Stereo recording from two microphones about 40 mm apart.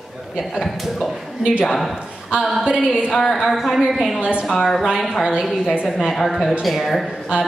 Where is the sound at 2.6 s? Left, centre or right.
Right.